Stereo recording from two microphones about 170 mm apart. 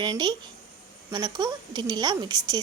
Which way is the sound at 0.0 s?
25° right (ahead or behind).